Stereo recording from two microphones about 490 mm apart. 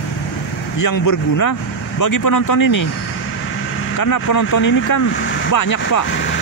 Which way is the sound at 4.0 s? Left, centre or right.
Left.